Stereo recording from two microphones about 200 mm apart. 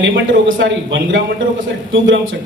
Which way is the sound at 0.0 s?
70° right (ahead or behind).